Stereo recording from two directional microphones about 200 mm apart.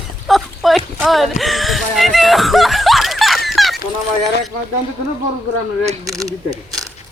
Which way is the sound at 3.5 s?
Centre (ahead or behind).